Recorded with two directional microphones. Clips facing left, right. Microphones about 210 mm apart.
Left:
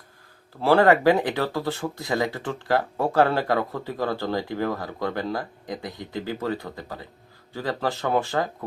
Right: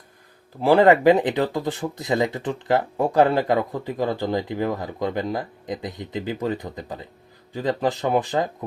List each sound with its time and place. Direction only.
0.6 s speech: 15° right (ahead or behind)